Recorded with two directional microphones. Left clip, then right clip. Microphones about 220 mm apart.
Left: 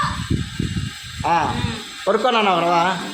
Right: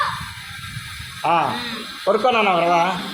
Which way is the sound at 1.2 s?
15° left (ahead or behind).